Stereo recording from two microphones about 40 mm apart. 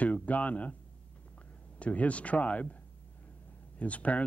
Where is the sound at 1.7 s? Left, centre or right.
Left.